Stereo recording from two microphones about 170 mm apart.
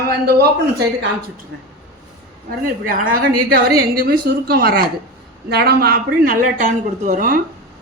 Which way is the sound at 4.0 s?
65° right (ahead or behind).